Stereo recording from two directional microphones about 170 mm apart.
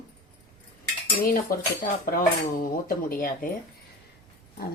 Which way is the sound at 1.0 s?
55° left (ahead or behind).